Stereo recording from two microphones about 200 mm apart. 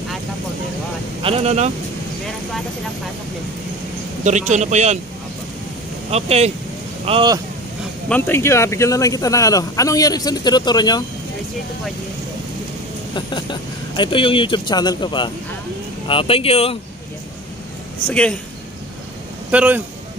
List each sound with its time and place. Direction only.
1.2 s a man's voice: 30° right (ahead or behind)
4.2 s a man's voice: 35° right (ahead or behind)
6.0 s a man's voice: 30° right (ahead or behind)
8.1 s speech: 10° left (ahead or behind)
13.1 s speech: 25° left (ahead or behind)
18.0 s a man's voice: 5° left (ahead or behind)
19.5 s a man's voice: 5° right (ahead or behind)